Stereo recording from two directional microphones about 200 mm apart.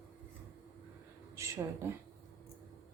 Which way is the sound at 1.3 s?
15° right (ahead or behind).